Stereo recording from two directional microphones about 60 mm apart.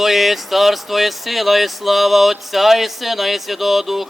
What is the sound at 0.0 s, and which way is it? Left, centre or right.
Speech, centre.